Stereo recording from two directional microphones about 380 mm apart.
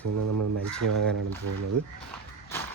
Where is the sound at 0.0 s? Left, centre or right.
Right.